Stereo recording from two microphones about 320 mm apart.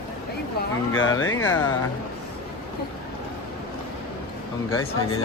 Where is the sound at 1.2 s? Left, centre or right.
Left.